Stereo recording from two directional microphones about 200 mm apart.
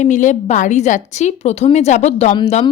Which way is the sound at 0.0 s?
40° left (ahead or behind).